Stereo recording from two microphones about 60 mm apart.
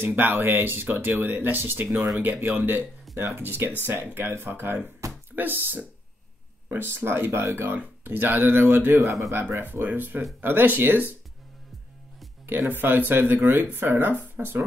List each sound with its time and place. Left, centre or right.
0.0 s speech: right
12.4 s speech: right